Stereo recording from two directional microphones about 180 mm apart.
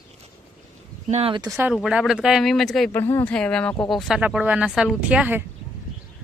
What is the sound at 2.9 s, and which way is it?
Speech, 10° left (ahead or behind).